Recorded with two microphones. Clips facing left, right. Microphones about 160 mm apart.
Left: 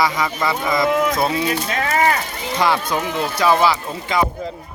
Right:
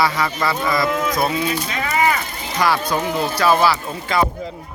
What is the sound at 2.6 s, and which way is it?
Speech, 20° left (ahead or behind).